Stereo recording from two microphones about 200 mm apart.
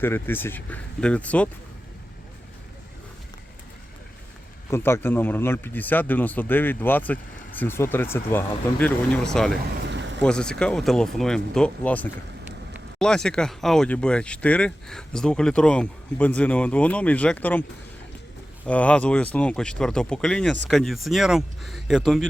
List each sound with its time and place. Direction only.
0.0 s speech: 10° left (ahead or behind)
4.7 s speech: 10° left (ahead or behind)
9.8 s a sound: 60° right (ahead or behind)
10.2 s speech: 5° left (ahead or behind)
18.6 s speech: 5° left (ahead or behind)